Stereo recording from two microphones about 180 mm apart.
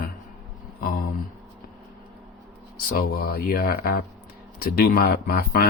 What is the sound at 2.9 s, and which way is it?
Speech, 55° left (ahead or behind).